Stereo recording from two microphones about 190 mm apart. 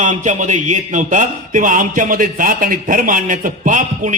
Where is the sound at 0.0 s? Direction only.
40° right (ahead or behind).